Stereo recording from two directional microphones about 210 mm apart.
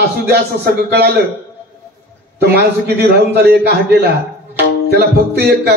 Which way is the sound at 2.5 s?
50° right (ahead or behind).